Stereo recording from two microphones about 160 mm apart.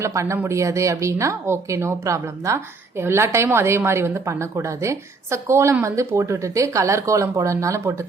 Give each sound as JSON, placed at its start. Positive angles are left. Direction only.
{"t": 0.0, "sound": "a woman's voice", "side_deg": -20}